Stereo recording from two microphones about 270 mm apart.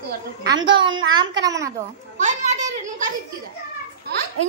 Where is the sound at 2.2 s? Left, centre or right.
Right.